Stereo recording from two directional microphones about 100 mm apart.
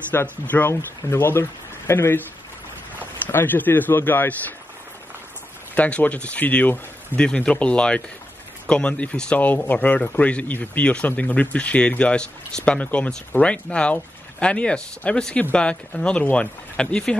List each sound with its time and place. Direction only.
0.1 s speech: 20° left (ahead or behind)
3.3 s speech: 20° left (ahead or behind)
5.8 s speech: 15° left (ahead or behind)